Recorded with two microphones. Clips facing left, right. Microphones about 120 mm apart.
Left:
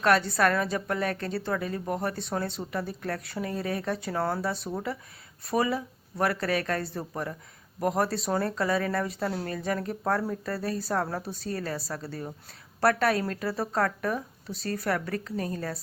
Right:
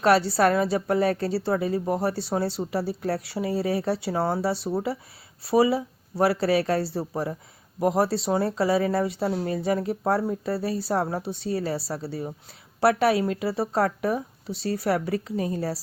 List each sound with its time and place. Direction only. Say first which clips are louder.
0.0 s speech: right 4 dB; 30° right (ahead or behind)
9.3 s a woman's voice: right 6 dB; 10° right (ahead or behind)
9.6 s speech: right 5 dB; 25° right (ahead or behind)
9.8 s a woman's voice: right 5 dB; 10° right (ahead or behind)
10.1 s speech: right 3 dB; 25° right (ahead or behind)
10.6 s a woman's voice: right 3 dB; 5° right (ahead or behind)
10.8 s speech: right 4 dB; 25° right (ahead or behind)
12.8 s a woman's voice: right 4 dB; 5° right (ahead or behind)
13.6 s speech: right 3 dB; 25° right (ahead or behind)
14.5 s a woman's voice: right 4 dB; 5° right (ahead or behind)
14.8 s speech: right 4 dB; 25° right (ahead or behind)
15.1 s a woman's voice: right 5 dB; 15° right (ahead or behind)